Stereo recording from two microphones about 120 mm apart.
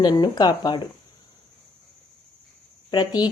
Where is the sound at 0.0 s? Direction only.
35° left (ahead or behind).